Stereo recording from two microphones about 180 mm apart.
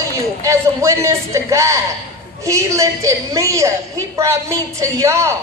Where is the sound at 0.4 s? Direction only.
15° right (ahead or behind).